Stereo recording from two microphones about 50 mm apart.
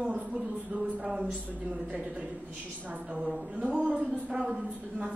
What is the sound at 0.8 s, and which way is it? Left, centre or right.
Speech, centre.